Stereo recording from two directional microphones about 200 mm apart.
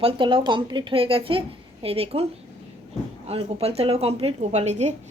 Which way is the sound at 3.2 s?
30° right (ahead or behind).